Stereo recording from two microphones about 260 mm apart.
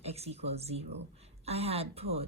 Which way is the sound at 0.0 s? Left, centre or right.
Right.